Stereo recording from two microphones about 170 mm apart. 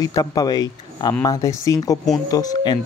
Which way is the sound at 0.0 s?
20° left (ahead or behind).